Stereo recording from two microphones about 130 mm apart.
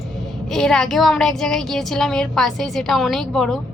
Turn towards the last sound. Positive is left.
turn(degrees=0)  # may be behind; listen again after turning